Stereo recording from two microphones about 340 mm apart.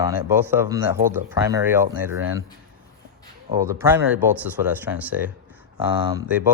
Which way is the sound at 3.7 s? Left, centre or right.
Centre.